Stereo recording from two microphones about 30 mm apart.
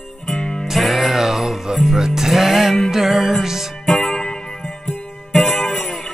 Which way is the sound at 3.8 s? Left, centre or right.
Centre.